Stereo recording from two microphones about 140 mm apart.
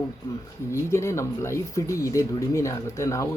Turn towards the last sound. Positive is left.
turn(degrees=20)  # may be behind; listen again after turning